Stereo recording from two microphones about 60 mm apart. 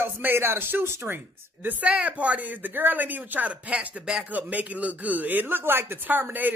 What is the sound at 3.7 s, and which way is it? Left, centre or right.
Speech, centre.